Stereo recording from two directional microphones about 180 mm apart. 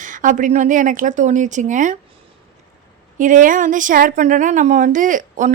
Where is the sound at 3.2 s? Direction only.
45° right (ahead or behind).